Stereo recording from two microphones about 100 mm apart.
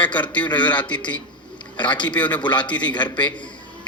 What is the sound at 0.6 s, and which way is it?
Speech, 15° left (ahead or behind).